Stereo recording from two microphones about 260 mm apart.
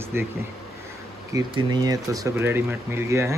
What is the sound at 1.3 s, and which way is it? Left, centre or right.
Speech, centre.